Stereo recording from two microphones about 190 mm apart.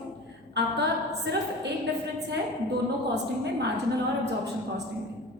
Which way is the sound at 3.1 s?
60° right (ahead or behind).